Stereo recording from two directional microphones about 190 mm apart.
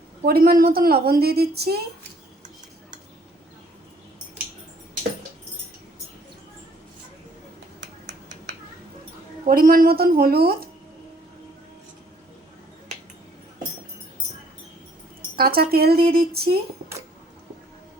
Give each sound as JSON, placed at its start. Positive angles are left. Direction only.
{"t": 0.3, "sound": "a woman's voice", "side_deg": -55}
{"t": 9.5, "sound": "a woman's voice", "side_deg": -50}
{"t": 15.4, "sound": "speech", "side_deg": -55}